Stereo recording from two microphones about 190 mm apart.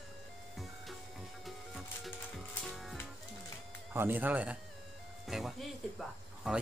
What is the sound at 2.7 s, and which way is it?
Music, centre (ahead or behind).